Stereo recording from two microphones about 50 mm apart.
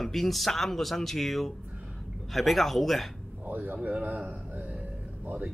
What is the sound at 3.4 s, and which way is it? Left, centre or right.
A man's voice, right.